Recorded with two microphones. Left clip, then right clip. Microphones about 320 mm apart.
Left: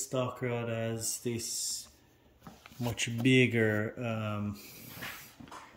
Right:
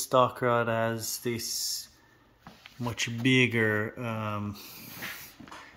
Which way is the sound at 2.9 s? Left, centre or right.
Centre.